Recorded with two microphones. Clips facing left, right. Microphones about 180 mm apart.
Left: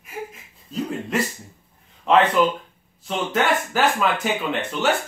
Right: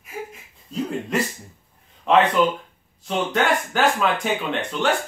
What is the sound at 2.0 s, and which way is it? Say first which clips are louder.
Speech: even; centre (ahead or behind).